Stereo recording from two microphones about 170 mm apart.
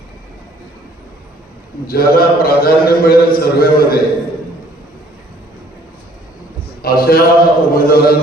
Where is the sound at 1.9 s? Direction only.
60° left (ahead or behind).